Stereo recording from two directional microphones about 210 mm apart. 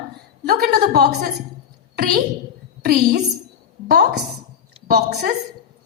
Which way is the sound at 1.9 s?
50° right (ahead or behind).